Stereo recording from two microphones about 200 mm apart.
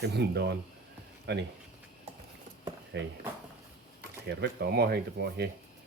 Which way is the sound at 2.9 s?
60° right (ahead or behind).